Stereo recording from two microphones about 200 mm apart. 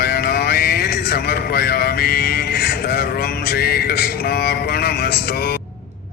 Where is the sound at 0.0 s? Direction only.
50° left (ahead or behind).